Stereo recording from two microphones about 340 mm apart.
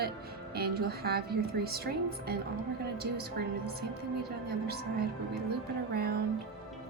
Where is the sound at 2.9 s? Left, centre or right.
Right.